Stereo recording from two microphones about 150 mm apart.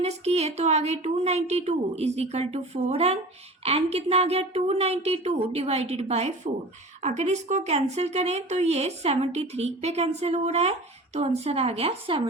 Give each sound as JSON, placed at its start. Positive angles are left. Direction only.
{"t": 0.0, "sound": "a woman's voice", "side_deg": -45}